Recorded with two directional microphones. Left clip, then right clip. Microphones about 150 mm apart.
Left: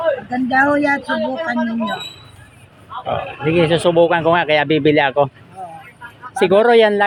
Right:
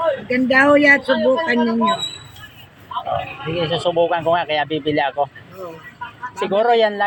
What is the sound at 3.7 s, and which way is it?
Speech, 90° left.